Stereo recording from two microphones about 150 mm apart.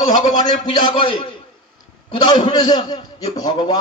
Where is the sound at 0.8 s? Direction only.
35° left (ahead or behind).